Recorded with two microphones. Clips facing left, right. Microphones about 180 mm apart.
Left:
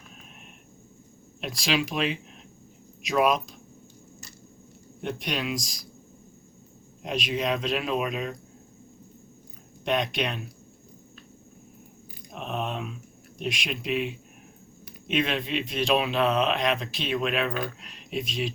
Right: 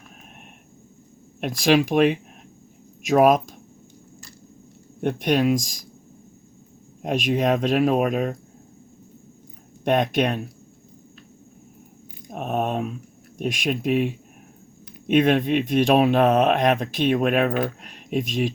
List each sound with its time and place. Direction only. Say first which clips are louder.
1.4 s speech: right 9 dB; 50° right (ahead or behind)
4.9 s speech: right 10 dB; 50° right (ahead or behind)
7.0 s speech: right 7 dB; 50° right (ahead or behind)
9.8 s speech: right 7 dB; 50° right (ahead or behind)
12.3 s speech: right 7 dB; 50° right (ahead or behind)